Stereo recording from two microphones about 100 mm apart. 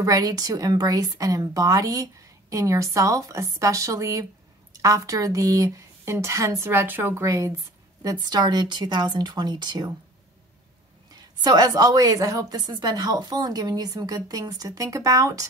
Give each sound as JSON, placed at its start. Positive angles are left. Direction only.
{"t": 0.0, "sound": "speech", "side_deg": -40}
{"t": 7.2, "sound": "speech", "side_deg": -35}
{"t": 11.1, "sound": "speech", "side_deg": -40}